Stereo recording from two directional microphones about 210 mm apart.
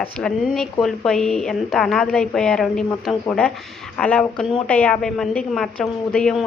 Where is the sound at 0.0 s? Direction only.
5° left (ahead or behind).